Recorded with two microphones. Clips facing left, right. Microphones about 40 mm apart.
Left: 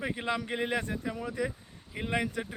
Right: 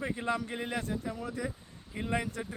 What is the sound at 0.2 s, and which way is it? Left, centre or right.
Speech, left.